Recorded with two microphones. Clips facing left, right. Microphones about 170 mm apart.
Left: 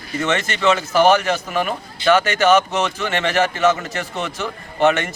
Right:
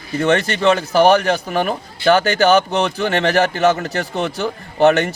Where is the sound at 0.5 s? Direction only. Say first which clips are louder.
Right 2 dB; 35° right (ahead or behind).